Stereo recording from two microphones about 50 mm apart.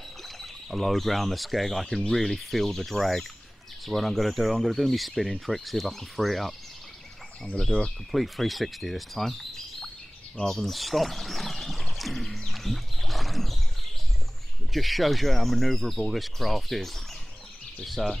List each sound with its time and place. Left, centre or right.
0.2 s speech: centre
7.7 s speech: left
8.1 s speech: centre
10.3 s a sound: centre
14.7 s speech: centre